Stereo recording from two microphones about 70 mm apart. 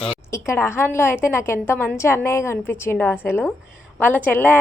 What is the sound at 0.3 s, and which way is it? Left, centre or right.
A woman's voice, left.